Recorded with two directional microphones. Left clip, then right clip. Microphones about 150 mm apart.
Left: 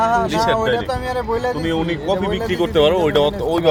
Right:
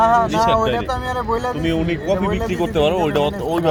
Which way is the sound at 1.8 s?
30° left (ahead or behind).